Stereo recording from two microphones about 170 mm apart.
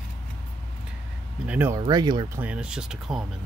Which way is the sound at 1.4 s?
10° right (ahead or behind).